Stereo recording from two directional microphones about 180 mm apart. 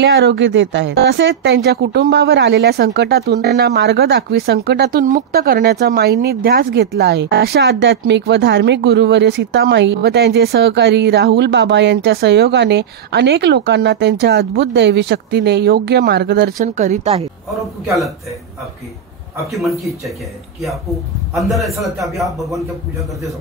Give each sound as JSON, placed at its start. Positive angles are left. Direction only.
{"t": 0.0, "sound": "speech", "side_deg": -75}
{"t": 5.0, "sound": "speech", "side_deg": -50}
{"t": 16.5, "sound": "speech", "side_deg": -45}
{"t": 21.4, "sound": "a man's voice", "side_deg": 0}